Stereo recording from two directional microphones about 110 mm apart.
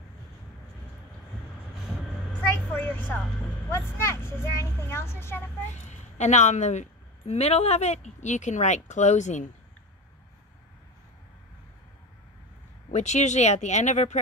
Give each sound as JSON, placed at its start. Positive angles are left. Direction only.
{"t": 2.4, "sound": "vehicle", "side_deg": 20}
{"t": 4.0, "sound": "a child's voice", "side_deg": 25}
{"t": 5.7, "sound": "a woman's voice", "side_deg": 90}
{"t": 12.9, "sound": "a woman's voice", "side_deg": 90}